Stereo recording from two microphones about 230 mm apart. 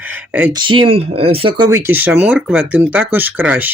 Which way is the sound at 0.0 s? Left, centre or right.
Centre.